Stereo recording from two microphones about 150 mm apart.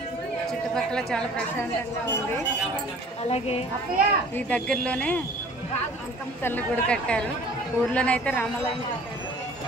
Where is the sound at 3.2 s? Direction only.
40° left (ahead or behind).